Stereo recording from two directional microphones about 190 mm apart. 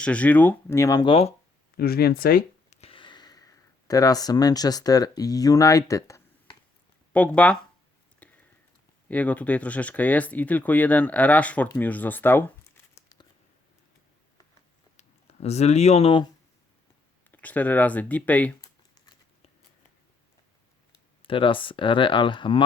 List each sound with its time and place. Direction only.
0.0 s speech: 5° left (ahead or behind); by 1.3 s 25° left (ahead or behind)
1.7 s speech: 55° left (ahead or behind)
2.6 s speech: 30° left (ahead or behind); by 7.6 s 5° left (ahead or behind)
8.2 s a sound: 5° left (ahead or behind)
9.0 s speech: 10° left (ahead or behind)
11.7 s a sound: 10° left (ahead or behind)
14.9 s speech: 35° left (ahead or behind)
17.3 s speech: 10° left (ahead or behind)
21.2 s speech: 25° left (ahead or behind)